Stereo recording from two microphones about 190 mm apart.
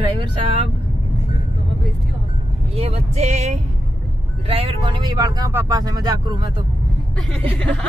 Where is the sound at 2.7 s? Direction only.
35° right (ahead or behind).